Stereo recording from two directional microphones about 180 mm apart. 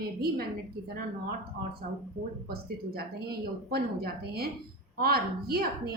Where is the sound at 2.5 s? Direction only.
60° right (ahead or behind).